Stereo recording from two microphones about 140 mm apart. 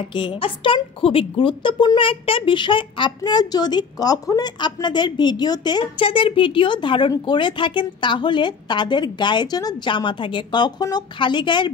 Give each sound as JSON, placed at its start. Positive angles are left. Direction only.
{"t": 0.1, "sound": "speech", "side_deg": 35}